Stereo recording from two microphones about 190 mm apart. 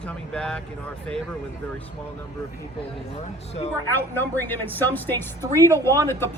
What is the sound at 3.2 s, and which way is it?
Speech, 35° left (ahead or behind).